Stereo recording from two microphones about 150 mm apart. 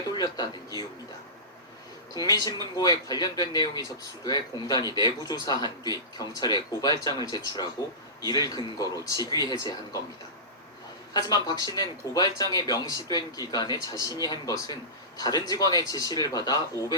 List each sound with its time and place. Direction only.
0.1 s speech: 25° left (ahead or behind)
2.1 s speech: 25° left (ahead or behind)
11.1 s speech: 25° left (ahead or behind)